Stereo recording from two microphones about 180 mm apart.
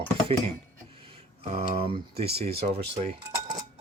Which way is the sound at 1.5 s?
30° right (ahead or behind).